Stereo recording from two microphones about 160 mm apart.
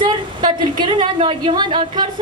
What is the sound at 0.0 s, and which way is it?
A woman's voice, 30° right (ahead or behind).